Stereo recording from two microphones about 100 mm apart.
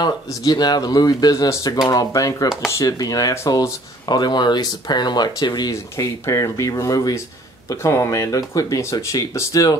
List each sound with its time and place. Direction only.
0.0 s speech: 45° left (ahead or behind)